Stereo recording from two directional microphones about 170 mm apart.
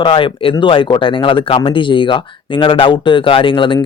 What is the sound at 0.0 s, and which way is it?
Speech, 30° left (ahead or behind).